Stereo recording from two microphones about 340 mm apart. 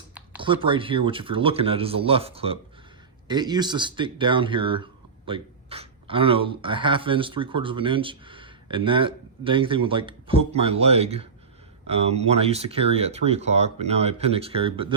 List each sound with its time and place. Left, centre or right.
0.1 s speech: centre